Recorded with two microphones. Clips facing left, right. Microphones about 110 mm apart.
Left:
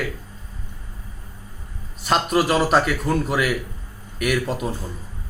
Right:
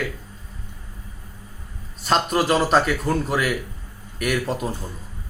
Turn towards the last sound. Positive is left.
turn(degrees=5)  # may be behind; listen again after turning